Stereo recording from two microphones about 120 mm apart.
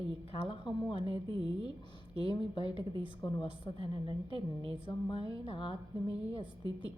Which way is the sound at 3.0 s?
40° left (ahead or behind).